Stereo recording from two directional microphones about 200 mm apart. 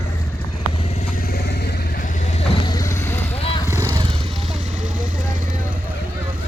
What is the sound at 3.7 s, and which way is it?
Vehicle, 15° right (ahead or behind).